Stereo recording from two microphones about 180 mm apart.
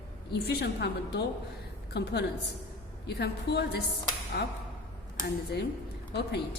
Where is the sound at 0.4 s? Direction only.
65° left (ahead or behind).